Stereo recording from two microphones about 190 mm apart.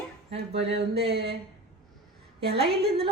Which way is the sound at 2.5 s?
30° right (ahead or behind).